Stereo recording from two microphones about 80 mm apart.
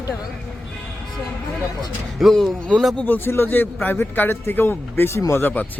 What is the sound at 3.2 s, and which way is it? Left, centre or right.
Speech, left.